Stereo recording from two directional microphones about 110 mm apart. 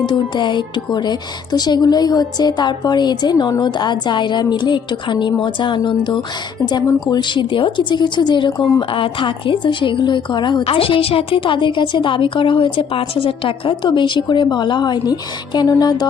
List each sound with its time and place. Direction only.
0.1 s a woman's voice: 45° left (ahead or behind)
7.1 s a woman's voice: 45° left (ahead or behind)
10.6 s a woman's voice: 55° left (ahead or behind); by 16.0 s 40° left (ahead or behind)